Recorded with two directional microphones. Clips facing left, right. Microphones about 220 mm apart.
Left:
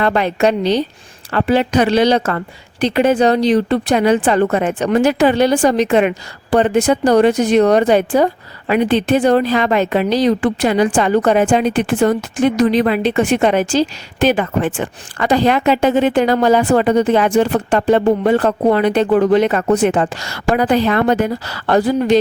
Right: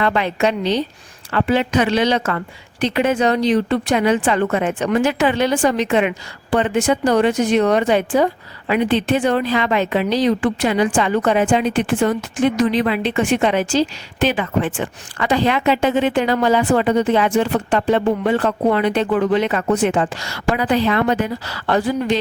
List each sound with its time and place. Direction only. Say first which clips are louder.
0.0 s a woman's voice: left 3 dB; 40° left (ahead or behind)